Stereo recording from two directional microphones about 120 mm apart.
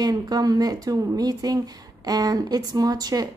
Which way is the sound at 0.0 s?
30° right (ahead or behind).